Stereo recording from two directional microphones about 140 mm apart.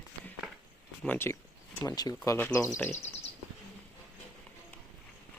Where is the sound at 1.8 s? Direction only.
25° left (ahead or behind).